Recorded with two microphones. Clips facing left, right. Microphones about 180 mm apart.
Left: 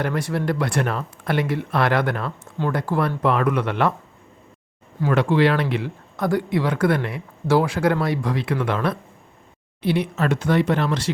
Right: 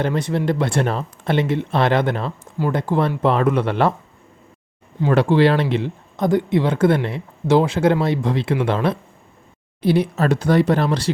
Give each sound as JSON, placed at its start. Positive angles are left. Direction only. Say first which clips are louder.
{"t": 0.0, "sound": "speech", "louder": "right 3 dB", "side_deg": -20}
{"t": 2.4, "sound": "speech", "louder": "right 2 dB", "side_deg": -10}
{"t": 2.7, "sound": "speech", "louder": "right 3 dB", "side_deg": -20}
{"t": 4.9, "sound": "speech", "louder": "right 3 dB", "side_deg": -30}